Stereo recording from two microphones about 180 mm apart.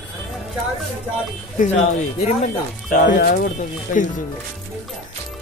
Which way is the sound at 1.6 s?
40° left (ahead or behind).